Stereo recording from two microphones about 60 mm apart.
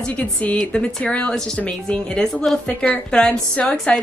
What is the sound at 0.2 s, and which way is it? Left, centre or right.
A woman's voice, left.